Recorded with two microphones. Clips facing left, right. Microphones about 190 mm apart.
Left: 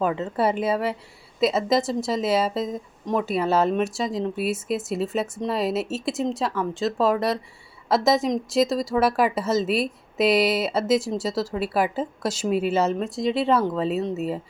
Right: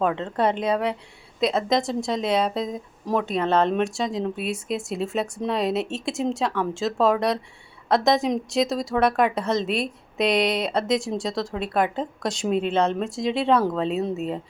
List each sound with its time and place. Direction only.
0.0 s speech: 5° left (ahead or behind)